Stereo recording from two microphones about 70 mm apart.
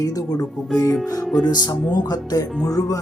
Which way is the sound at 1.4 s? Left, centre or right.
Left.